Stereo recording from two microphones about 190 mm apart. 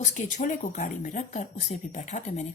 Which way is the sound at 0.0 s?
40° left (ahead or behind).